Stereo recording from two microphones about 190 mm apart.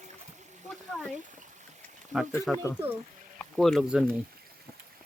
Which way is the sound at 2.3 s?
15° left (ahead or behind).